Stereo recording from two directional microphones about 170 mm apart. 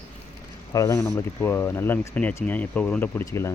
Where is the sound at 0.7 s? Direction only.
20° left (ahead or behind).